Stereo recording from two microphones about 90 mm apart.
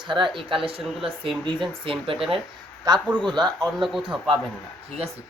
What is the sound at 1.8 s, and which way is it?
Speech, 80° right.